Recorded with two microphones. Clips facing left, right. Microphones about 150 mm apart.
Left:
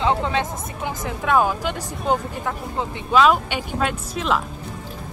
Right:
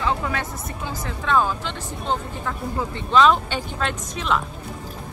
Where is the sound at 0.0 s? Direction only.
20° left (ahead or behind); by 4.4 s 5° left (ahead or behind).